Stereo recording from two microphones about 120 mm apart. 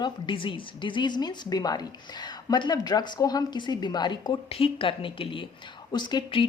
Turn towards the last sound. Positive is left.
turn(degrees=40)  # may be behind; listen again after turning